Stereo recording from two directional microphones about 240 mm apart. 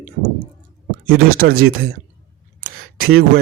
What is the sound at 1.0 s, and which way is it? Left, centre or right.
Speech, right.